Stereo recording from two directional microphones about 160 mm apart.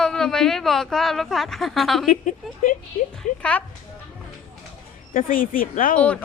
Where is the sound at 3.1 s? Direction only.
10° left (ahead or behind).